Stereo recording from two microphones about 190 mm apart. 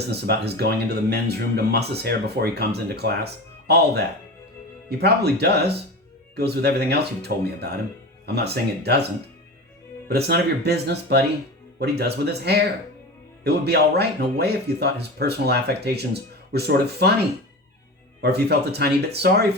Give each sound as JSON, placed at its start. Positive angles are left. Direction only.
{"t": 0.1, "sound": "speech", "side_deg": -60}
{"t": 8.8, "sound": "speech", "side_deg": -60}
{"t": 10.1, "sound": "speech", "side_deg": -55}
{"t": 18.2, "sound": "speech", "side_deg": -60}